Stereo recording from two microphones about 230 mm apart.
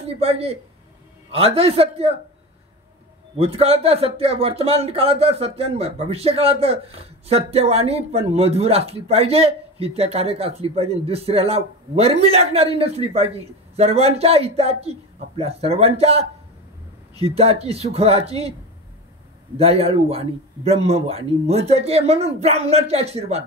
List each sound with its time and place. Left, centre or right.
0.0 s speech: right
3.3 s speech: right
19.6 s speech: right